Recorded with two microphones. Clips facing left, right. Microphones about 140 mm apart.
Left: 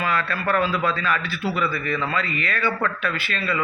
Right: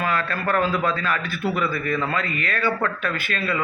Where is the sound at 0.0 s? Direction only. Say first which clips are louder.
Even; 45° right (ahead or behind).